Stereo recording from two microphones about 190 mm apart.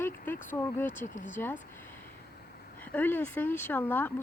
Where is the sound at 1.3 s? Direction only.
10° left (ahead or behind).